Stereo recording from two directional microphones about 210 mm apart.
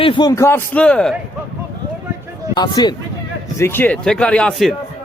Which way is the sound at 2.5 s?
20° left (ahead or behind).